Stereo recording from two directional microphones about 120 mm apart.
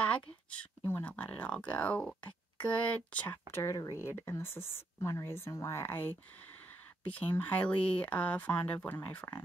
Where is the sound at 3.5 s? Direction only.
25° left (ahead or behind).